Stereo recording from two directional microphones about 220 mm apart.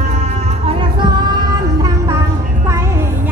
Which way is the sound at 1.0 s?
20° right (ahead or behind).